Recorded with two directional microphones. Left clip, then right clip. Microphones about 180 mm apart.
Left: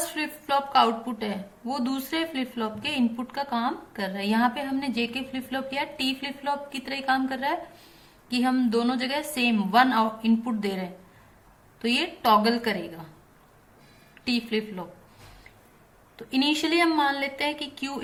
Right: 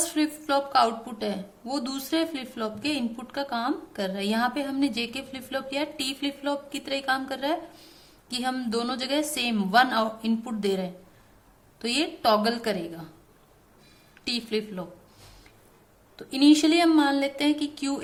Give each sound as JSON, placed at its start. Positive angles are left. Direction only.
{"t": 0.2, "sound": "a woman's voice", "side_deg": -55}
{"t": 14.3, "sound": "a woman's voice", "side_deg": -55}
{"t": 16.1, "sound": "a woman's voice", "side_deg": -50}